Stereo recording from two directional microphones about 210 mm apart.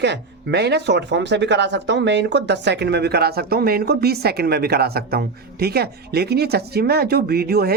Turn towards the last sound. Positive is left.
turn(degrees=-50)  # may be behind; listen again after turning